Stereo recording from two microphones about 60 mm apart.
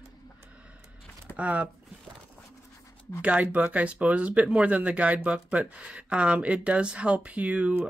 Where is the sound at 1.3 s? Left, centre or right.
Right.